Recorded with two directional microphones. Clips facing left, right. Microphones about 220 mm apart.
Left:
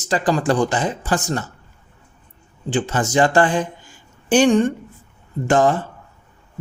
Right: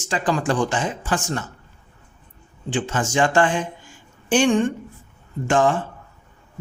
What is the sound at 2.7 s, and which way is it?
A man's voice, 40° left (ahead or behind).